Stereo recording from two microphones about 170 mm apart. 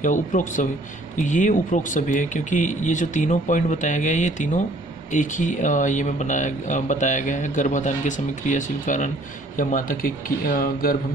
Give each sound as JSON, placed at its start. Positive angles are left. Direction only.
{"t": 0.0, "sound": "speech", "side_deg": 50}